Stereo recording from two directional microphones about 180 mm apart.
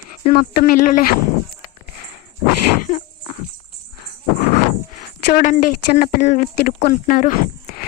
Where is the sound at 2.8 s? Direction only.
50° left (ahead or behind).